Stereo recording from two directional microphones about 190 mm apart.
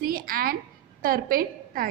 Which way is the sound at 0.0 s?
50° right (ahead or behind).